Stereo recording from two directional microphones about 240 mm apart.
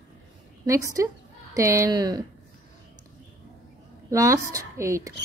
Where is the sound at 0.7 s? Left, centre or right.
Centre.